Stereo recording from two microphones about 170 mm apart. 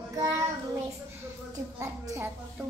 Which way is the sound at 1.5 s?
15° right (ahead or behind).